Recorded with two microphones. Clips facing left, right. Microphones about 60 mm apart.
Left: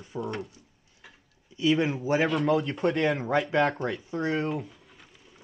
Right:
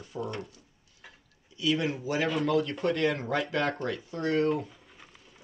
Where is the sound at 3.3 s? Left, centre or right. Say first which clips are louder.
Left 4 dB; left.